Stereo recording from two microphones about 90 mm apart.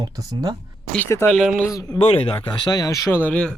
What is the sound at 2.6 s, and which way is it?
Speech, 45° left (ahead or behind).